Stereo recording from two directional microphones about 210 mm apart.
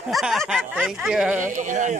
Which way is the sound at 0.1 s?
Centre (ahead or behind).